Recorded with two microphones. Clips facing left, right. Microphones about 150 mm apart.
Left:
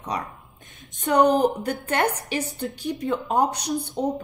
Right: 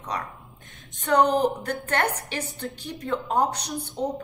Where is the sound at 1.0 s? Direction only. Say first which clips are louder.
Left 2 dB; 15° left (ahead or behind).